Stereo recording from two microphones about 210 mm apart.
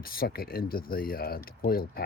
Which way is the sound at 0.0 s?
45° left (ahead or behind).